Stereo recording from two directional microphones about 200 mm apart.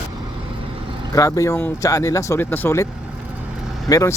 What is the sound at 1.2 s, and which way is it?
Speech, 15° left (ahead or behind).